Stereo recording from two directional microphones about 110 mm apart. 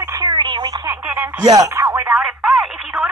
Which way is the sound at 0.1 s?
40° right (ahead or behind).